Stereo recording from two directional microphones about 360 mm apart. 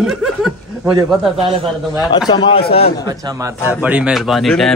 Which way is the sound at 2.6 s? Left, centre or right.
Left.